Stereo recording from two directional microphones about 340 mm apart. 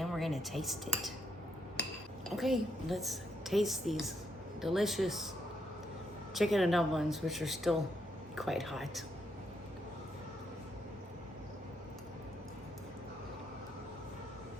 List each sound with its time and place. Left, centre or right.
0.0 s speech: centre
2.3 s a woman's voice: centre
6.3 s a woman's voice: centre